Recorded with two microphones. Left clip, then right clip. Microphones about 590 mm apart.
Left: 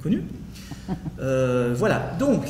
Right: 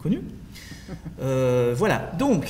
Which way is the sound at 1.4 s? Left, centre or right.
Right.